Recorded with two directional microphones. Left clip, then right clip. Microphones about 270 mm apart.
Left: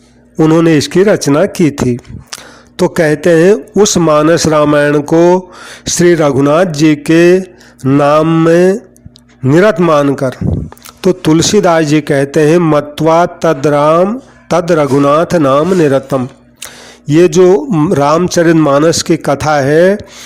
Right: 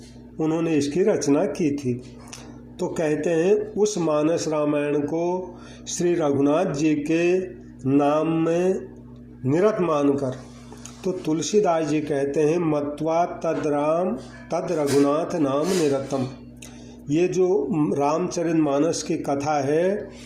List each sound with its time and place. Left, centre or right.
0.3 s a man's voice: left
9.8 s a man's voice: left